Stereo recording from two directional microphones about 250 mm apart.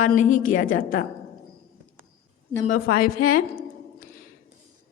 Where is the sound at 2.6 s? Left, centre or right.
Left.